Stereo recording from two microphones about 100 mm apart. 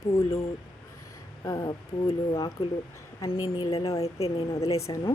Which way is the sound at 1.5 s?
40° left (ahead or behind).